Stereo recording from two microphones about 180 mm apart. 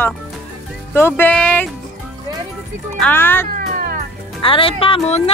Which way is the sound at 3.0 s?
10° left (ahead or behind).